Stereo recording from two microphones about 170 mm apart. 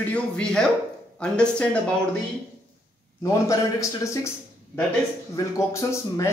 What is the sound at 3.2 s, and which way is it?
A man's voice, 20° left (ahead or behind).